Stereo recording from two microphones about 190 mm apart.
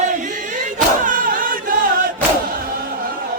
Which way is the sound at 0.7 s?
45° right (ahead or behind).